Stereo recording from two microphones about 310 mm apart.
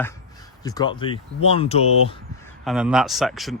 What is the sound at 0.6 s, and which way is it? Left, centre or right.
Speech, centre.